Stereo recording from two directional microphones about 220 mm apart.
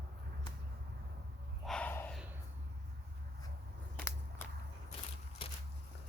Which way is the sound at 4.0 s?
10° left (ahead or behind).